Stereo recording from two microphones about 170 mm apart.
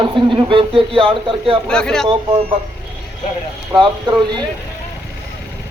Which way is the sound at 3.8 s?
25° right (ahead or behind).